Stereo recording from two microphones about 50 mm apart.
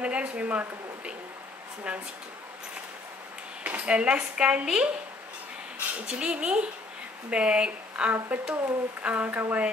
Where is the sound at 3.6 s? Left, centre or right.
Right.